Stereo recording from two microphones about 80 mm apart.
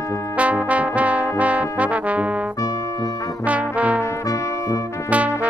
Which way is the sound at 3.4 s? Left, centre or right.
Centre.